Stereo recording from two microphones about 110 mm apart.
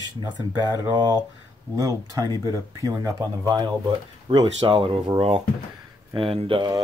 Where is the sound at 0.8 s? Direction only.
40° right (ahead or behind).